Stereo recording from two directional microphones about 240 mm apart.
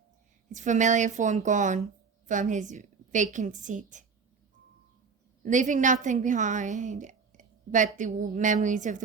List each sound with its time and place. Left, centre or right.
0.5 s a woman's voice: right
5.5 s a woman's voice: right